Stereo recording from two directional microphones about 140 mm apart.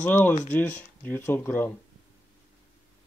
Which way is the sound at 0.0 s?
10° left (ahead or behind).